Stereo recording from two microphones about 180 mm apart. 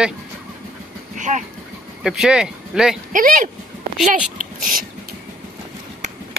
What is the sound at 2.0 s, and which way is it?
Speech, centre (ahead or behind).